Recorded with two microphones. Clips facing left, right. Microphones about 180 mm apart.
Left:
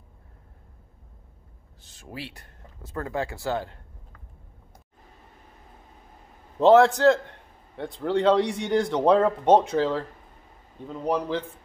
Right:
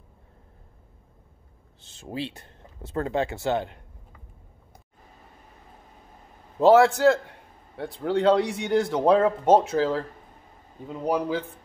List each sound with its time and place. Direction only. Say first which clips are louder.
1.8 s speech: right 6 dB; 25° right (ahead or behind)
6.6 s a man's voice: even; 5° right (ahead or behind)